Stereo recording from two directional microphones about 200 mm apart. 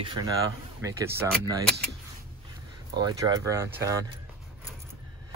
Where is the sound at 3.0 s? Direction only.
20° right (ahead or behind).